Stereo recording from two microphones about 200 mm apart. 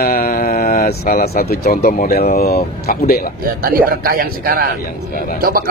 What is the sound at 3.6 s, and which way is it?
Speech, 45° right (ahead or behind).